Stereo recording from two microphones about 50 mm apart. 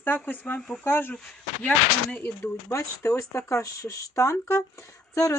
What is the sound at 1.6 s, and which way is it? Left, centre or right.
Speech, left.